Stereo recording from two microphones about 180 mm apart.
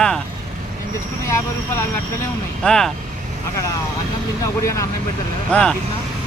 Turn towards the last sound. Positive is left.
turn(degrees=5)  # may be behind; listen again after turning